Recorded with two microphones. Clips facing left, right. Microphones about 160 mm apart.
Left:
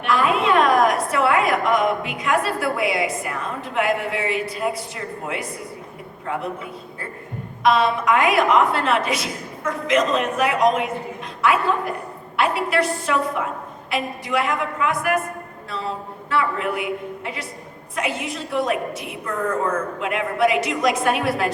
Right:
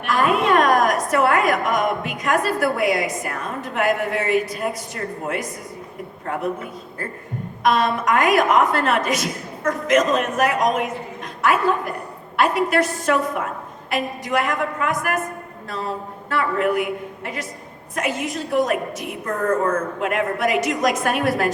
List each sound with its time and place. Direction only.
0.0 s a woman's voice: 45° right (ahead or behind)
12.4 s a woman's voice: 45° right (ahead or behind)
16.3 s a woman's voice: 50° right (ahead or behind)